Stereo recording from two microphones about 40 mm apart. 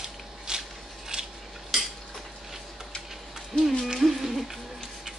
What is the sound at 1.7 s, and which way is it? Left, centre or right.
Cutlery, centre.